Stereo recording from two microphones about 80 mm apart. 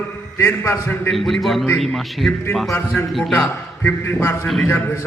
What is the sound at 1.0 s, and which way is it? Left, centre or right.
A man's voice, centre.